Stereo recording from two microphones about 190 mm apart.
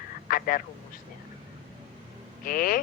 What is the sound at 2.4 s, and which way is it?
Speech, 50° left (ahead or behind).